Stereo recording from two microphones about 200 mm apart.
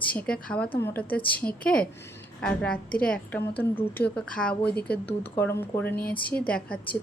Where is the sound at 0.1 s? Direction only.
5° left (ahead or behind).